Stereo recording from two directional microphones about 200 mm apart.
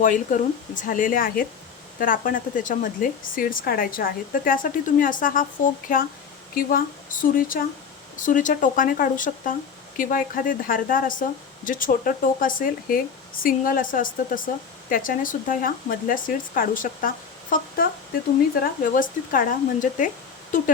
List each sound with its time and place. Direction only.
0.0 s speech: 40° left (ahead or behind)